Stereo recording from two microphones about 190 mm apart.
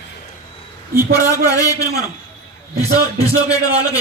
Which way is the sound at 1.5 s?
15° left (ahead or behind).